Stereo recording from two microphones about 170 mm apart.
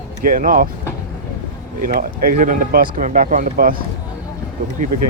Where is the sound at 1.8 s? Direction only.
60° right (ahead or behind).